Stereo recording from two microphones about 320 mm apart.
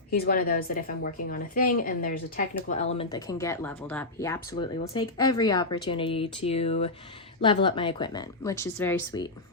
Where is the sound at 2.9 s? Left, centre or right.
Centre.